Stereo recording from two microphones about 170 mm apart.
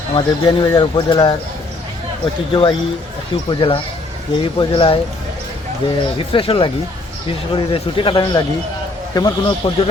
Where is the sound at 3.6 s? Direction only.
30° left (ahead or behind).